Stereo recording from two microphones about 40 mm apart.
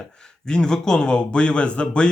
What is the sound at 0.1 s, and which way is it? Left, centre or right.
A man's voice, centre.